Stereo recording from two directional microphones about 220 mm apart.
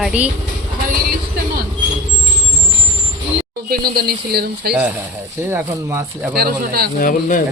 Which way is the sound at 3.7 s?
45° right (ahead or behind).